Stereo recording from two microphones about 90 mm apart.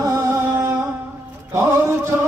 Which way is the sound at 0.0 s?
35° right (ahead or behind).